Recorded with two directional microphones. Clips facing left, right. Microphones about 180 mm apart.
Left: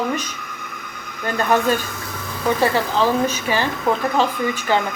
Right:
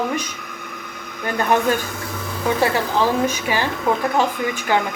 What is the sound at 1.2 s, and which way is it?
Speech, 15° right (ahead or behind).